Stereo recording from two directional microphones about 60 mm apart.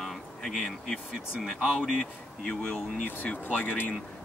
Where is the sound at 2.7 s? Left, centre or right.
Left.